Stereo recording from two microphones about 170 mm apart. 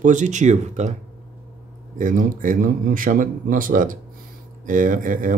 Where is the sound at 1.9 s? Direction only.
50° right (ahead or behind).